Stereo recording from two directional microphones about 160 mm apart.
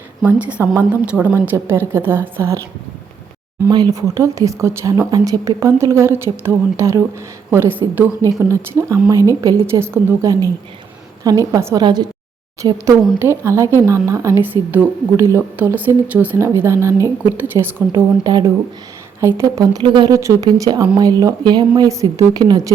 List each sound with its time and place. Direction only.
0.3 s speech: 10° right (ahead or behind)
3.7 s speech: 25° right (ahead or behind)
18.2 s speech: 25° right (ahead or behind)